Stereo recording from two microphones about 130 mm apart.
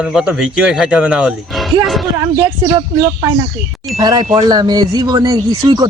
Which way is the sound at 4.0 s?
30° right (ahead or behind).